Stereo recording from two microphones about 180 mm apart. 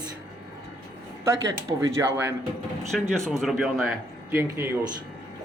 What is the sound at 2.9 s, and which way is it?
Speech, 5° left (ahead or behind).